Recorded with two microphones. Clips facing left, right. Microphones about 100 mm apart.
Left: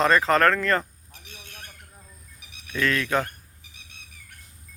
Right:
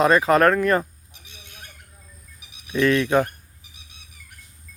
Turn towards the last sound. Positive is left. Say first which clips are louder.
# right 6 dB
turn(degrees=-15)  # may be behind; listen again after turning